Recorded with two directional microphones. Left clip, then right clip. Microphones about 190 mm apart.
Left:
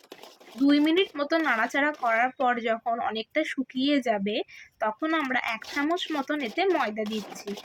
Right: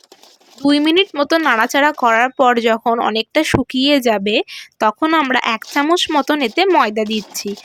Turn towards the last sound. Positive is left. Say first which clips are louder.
# right 12 dB
turn(degrees=-50)  # may be behind; listen again after turning